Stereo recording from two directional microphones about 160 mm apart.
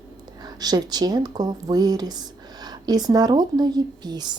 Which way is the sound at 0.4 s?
25° right (ahead or behind).